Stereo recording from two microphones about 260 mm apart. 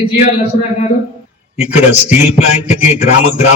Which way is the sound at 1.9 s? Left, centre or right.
Left.